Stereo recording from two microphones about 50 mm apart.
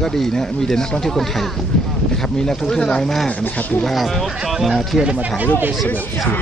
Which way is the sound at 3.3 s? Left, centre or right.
Left.